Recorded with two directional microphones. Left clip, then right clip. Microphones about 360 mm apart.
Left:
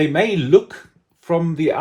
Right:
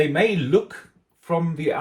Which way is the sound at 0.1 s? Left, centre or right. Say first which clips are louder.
Left 5 dB; left.